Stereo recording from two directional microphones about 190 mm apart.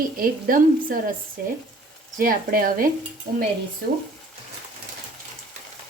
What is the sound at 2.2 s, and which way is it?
Speech, 50° right (ahead or behind).